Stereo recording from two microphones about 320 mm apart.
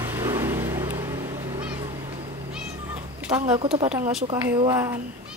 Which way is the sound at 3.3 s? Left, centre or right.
Centre.